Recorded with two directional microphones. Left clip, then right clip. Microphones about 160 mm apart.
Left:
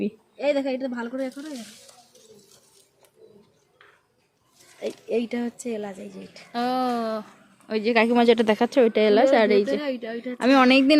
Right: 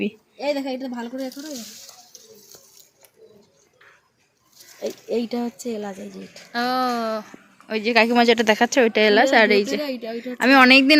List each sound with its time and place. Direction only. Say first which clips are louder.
0.0 s a woman's voice: even; centre (ahead or behind)
4.8 s speech: right 1 dB; 30° right (ahead or behind)
6.5 s a woman's voice: right 3 dB; centre (ahead or behind)
9.8 s speech: right 1 dB; 25° right (ahead or behind)
10.3 s a woman's voice: right 5 dB; 5° right (ahead or behind)